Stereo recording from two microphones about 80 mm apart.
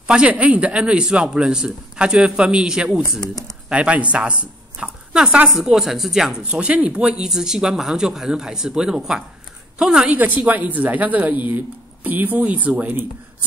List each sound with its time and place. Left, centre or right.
0.0 s a man's voice: centre
6.4 s a man's voice: centre